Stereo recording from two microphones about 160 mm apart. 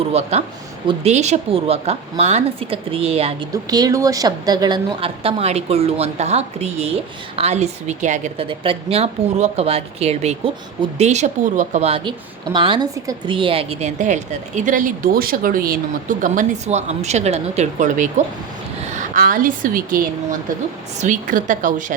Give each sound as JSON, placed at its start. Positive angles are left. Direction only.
{"t": 0.1, "sound": "a woman's voice", "side_deg": -40}
{"t": 3.5, "sound": "a woman's voice", "side_deg": -25}
{"t": 8.4, "sound": "a woman's voice", "side_deg": -35}